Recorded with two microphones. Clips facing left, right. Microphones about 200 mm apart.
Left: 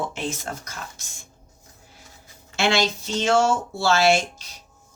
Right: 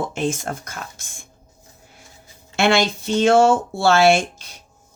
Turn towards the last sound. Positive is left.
turn(degrees=-55)  # may be behind; listen again after turning